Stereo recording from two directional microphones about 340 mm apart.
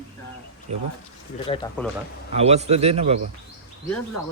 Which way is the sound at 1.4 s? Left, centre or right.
Centre.